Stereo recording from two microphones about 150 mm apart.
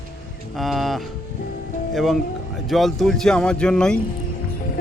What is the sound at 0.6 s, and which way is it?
Speech, centre (ahead or behind).